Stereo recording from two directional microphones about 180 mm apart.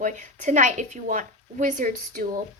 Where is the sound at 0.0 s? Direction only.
45° right (ahead or behind).